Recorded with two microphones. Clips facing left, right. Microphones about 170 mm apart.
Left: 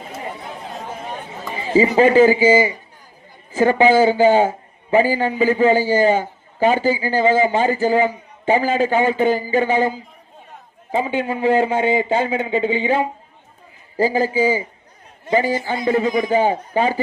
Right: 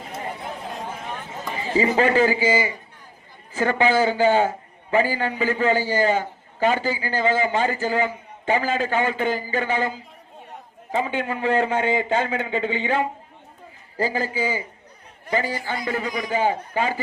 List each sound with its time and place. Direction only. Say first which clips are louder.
1.5 s a man's voice: left 5 dB; 20° left (ahead or behind)
11.8 s a man's voice: left 4 dB; 30° left (ahead or behind)